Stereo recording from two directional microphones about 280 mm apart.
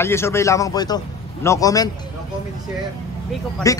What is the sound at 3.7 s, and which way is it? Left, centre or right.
Speech, centre.